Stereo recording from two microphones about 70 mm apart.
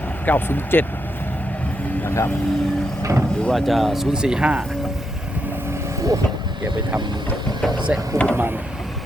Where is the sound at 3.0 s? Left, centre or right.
Right.